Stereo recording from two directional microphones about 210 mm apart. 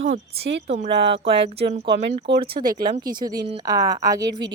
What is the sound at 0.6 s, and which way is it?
Speech, 30° right (ahead or behind).